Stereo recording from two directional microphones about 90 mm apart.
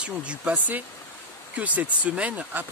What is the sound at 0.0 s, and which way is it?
Speech, 15° right (ahead or behind).